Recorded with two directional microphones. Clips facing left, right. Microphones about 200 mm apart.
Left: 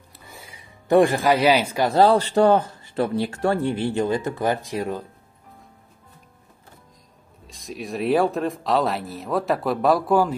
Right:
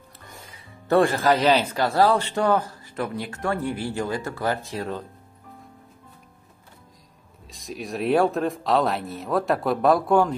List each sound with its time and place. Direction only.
0.2 s music: 5° left (ahead or behind)
2.0 s speech: 30° left (ahead or behind); by 5.0 s 15° left (ahead or behind)
7.4 s speech: centre (ahead or behind)